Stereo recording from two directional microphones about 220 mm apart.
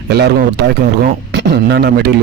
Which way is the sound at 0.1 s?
50° right (ahead or behind).